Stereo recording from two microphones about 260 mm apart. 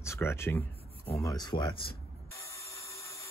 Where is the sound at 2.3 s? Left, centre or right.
Centre.